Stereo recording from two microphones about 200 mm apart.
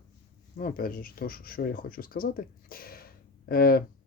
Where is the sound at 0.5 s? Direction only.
45° left (ahead or behind).